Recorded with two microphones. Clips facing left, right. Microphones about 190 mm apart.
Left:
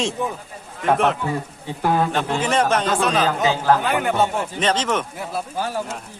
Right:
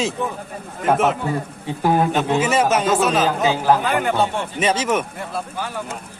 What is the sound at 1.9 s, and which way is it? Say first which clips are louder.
A man's voice: right 3 dB; 15° right (ahead or behind).